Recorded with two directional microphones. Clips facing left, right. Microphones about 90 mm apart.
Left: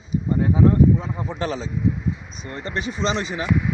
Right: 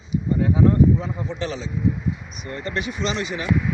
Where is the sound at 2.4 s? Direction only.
30° left (ahead or behind).